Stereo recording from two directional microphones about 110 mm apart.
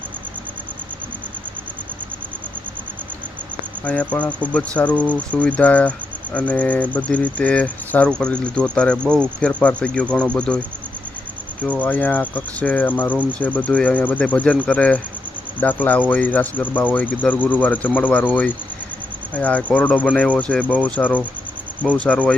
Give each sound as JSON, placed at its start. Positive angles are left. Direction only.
{"t": 3.8, "sound": "speech", "side_deg": 10}
{"t": 11.8, "sound": "speech", "side_deg": 15}
{"t": 19.3, "sound": "speech", "side_deg": 15}